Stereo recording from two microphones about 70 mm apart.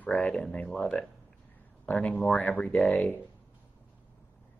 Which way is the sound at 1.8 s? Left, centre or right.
Left.